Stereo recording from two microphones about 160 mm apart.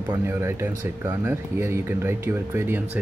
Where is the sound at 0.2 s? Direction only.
15° right (ahead or behind).